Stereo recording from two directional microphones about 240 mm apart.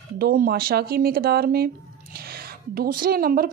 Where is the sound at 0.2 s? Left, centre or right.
Right.